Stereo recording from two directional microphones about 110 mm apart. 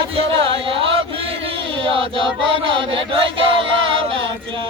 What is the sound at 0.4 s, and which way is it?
Chant, 55° right (ahead or behind).